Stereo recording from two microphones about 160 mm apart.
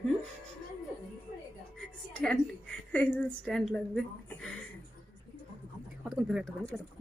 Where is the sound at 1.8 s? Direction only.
5° left (ahead or behind).